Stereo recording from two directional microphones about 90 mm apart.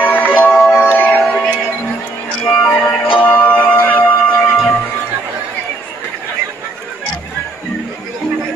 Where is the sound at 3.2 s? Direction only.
20° left (ahead or behind).